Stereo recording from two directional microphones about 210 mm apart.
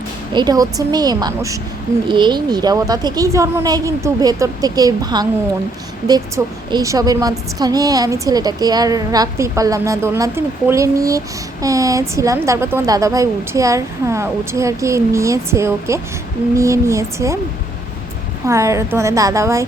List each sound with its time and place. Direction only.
0.3 s a woman's voice: 20° right (ahead or behind)
18.4 s a woman's voice: 15° right (ahead or behind)